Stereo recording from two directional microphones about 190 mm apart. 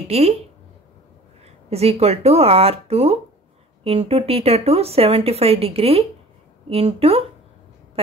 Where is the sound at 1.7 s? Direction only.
30° right (ahead or behind).